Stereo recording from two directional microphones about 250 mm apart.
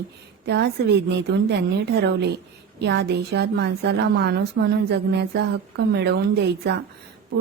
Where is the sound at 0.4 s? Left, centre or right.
Right.